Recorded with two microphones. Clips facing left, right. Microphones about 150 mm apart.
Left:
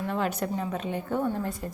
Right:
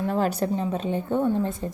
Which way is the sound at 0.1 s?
35° right (ahead or behind).